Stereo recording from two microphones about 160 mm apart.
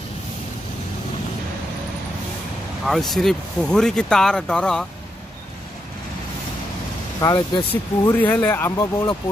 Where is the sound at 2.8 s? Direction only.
Centre (ahead or behind).